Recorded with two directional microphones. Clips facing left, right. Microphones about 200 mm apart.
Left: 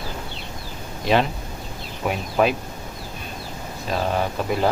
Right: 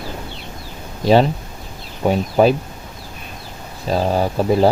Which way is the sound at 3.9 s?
35° right (ahead or behind).